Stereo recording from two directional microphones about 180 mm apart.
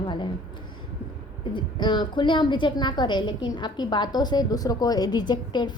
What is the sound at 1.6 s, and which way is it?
A woman's voice, 25° left (ahead or behind).